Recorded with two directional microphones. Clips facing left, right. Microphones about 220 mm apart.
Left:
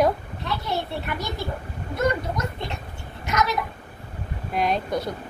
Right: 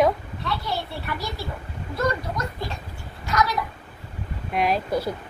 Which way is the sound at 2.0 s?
20° left (ahead or behind).